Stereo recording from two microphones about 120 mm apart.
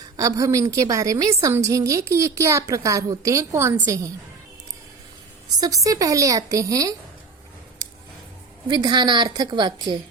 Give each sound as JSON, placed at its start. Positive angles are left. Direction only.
{"t": 0.0, "sound": "a woman's voice", "side_deg": -30}
{"t": 5.5, "sound": "a woman's voice", "side_deg": -30}
{"t": 7.8, "sound": "a sound", "side_deg": -30}
{"t": 8.6, "sound": "a woman's voice", "side_deg": -35}